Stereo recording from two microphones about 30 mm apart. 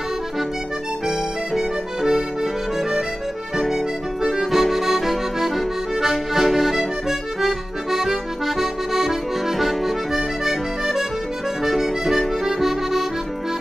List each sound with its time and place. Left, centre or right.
1.0 s music: centre
3.5 s accordion: centre
10.4 s music: centre
11.6 s accordion: centre